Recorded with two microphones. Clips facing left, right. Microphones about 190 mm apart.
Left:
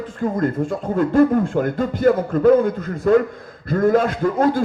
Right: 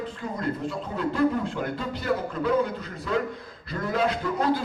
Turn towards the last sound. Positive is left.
turn(degrees=50)  # may be behind; listen again after turning